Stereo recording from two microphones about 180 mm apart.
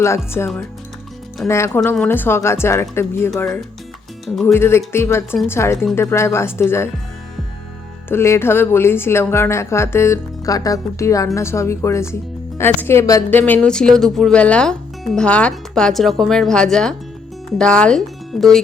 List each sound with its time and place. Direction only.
0.3 s speech: 15° left (ahead or behind)
4.3 s speech: centre (ahead or behind)
4.5 s speech: 15° left (ahead or behind)
8.1 s speech: 15° left (ahead or behind)